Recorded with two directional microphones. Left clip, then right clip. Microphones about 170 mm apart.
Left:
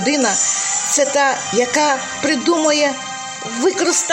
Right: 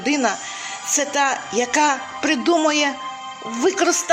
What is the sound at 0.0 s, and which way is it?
Speech, 30° right (ahead or behind).